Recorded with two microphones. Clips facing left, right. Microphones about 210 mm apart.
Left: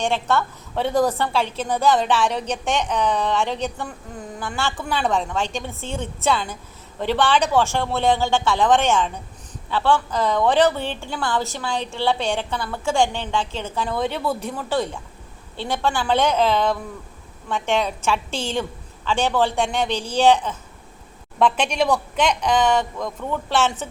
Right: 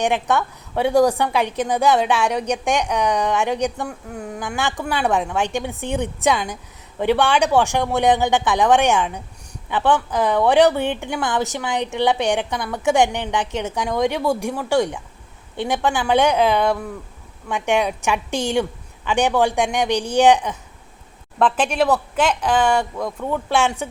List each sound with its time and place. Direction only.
0.0 s a woman's voice: 15° right (ahead or behind)